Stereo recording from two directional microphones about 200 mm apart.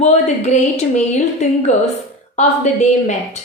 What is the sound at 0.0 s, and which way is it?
A woman's voice, 35° left (ahead or behind).